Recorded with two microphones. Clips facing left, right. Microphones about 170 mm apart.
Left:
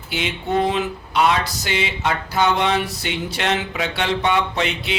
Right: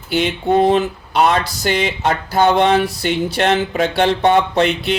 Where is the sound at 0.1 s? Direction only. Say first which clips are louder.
Right 7 dB; 40° right (ahead or behind).